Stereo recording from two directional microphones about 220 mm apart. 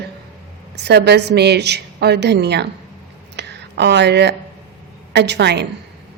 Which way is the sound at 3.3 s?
50° right (ahead or behind).